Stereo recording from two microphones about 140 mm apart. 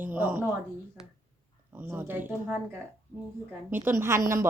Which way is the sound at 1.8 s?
15° right (ahead or behind).